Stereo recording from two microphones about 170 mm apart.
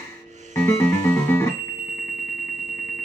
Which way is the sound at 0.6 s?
10° left (ahead or behind).